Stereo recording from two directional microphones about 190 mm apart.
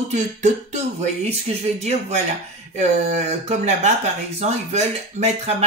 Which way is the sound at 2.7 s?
40° right (ahead or behind).